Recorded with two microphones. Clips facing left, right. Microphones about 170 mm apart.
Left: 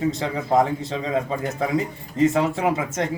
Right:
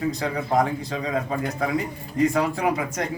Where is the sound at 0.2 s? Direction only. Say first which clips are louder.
Left 1 dB; 25° left (ahead or behind).